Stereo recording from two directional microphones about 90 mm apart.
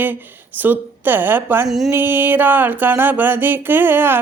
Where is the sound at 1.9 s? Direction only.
25° right (ahead or behind).